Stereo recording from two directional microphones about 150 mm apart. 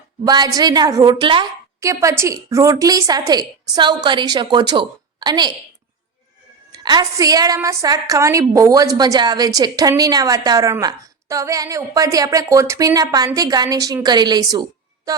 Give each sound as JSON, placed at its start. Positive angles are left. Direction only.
{"t": 0.3, "sound": "a woman's voice", "side_deg": -25}
{"t": 1.8, "sound": "a woman's voice", "side_deg": -20}
{"t": 6.7, "sound": "a woman's voice", "side_deg": -25}